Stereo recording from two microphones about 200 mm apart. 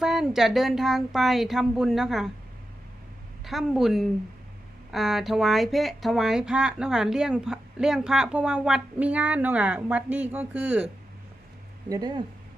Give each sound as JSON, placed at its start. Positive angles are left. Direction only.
{"t": 0.0, "sound": "speech", "side_deg": 0}
{"t": 3.4, "sound": "speech", "side_deg": 0}
{"t": 11.9, "sound": "speech", "side_deg": -20}